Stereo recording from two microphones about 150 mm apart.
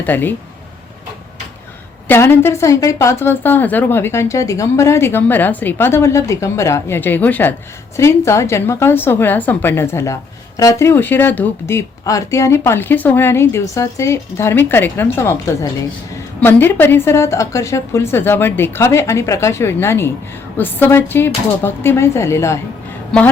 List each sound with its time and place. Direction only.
0.0 s a woman's voice: 10° left (ahead or behind)
2.0 s a woman's voice: 15° left (ahead or behind)